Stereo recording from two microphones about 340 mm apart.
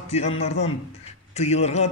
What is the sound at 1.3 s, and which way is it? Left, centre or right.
Speech, centre.